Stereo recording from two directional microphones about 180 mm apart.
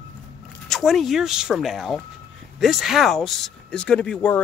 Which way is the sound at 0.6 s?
Centre (ahead or behind).